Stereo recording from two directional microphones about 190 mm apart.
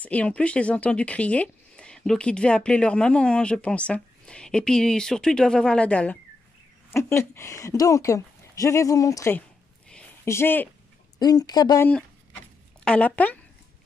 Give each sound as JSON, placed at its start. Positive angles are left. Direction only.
{"t": 0.0, "sound": "a woman's voice", "side_deg": 5}
{"t": 12.8, "sound": "a woman's voice", "side_deg": 5}